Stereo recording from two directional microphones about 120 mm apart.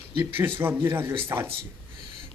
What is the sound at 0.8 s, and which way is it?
Speech, 20° right (ahead or behind).